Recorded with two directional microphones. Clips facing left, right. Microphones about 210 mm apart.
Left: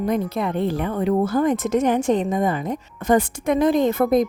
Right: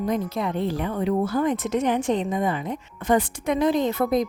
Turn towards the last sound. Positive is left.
turn(degrees=50)  # may be behind; listen again after turning